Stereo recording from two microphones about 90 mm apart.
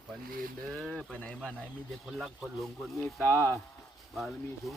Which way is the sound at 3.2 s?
25° left (ahead or behind).